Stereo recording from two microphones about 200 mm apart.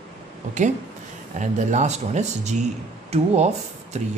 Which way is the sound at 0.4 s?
40° right (ahead or behind).